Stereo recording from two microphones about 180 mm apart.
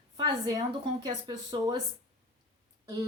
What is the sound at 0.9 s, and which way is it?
Speech, 20° right (ahead or behind).